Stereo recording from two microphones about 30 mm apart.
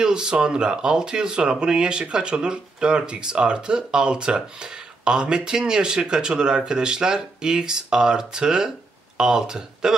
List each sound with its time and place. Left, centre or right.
0.0 s speech: right